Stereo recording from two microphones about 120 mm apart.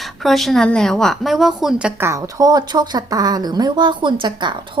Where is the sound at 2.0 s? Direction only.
25° right (ahead or behind).